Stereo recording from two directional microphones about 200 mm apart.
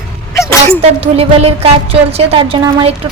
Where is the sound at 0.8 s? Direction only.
30° right (ahead or behind).